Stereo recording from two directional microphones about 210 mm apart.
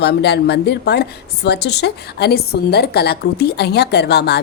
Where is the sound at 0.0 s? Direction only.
50° left (ahead or behind).